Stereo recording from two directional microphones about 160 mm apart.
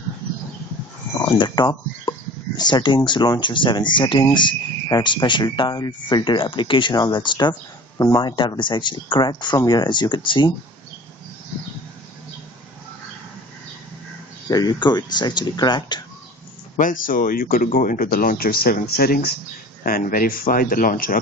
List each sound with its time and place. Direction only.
1.2 s speech: 30° left (ahead or behind)
14.5 s speech: 25° left (ahead or behind)
16.7 s speech: 60° left (ahead or behind)